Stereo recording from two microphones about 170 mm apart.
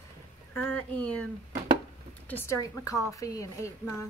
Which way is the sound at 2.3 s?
15° left (ahead or behind).